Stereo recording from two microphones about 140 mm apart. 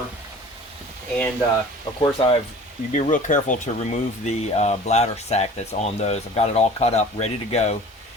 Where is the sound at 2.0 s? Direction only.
40° left (ahead or behind).